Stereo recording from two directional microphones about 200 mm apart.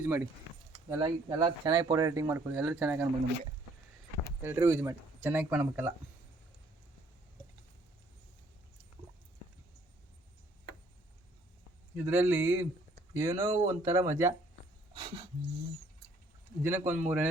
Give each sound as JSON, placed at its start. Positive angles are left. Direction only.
{"t": 0.0, "sound": "speech", "side_deg": -10}
{"t": 0.7, "sound": "speech", "side_deg": -20}
{"t": 4.4, "sound": "speech", "side_deg": -10}
{"t": 11.9, "sound": "speech", "side_deg": -10}
{"t": 16.6, "sound": "speech", "side_deg": -10}